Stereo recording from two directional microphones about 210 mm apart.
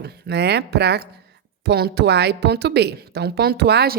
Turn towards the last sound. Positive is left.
turn(degrees=-50)  # may be behind; listen again after turning